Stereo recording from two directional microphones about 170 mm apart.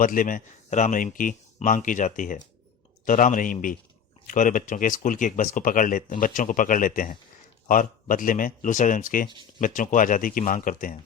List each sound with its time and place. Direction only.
0.0 s speech: 55° left (ahead or behind)